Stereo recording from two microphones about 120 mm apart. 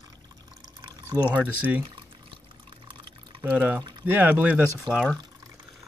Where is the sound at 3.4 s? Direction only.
15° right (ahead or behind).